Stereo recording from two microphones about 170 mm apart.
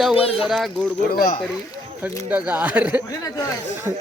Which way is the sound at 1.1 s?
55° left (ahead or behind).